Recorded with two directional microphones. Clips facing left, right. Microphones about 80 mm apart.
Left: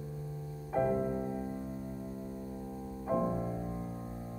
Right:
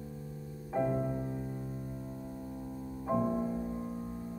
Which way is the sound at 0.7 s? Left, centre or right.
Centre.